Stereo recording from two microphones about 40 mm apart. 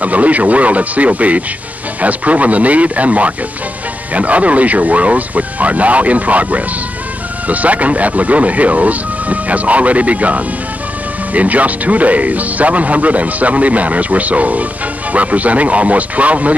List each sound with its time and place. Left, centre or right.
0.0 s speech: right